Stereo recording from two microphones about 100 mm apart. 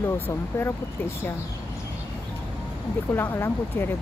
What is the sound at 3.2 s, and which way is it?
Speech, 20° left (ahead or behind).